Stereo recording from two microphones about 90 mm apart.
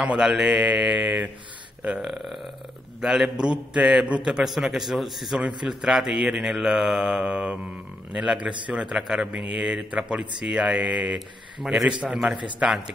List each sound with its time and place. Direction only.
0.0 s a man's voice: 10° right (ahead or behind)
2.0 s a man's voice: centre (ahead or behind)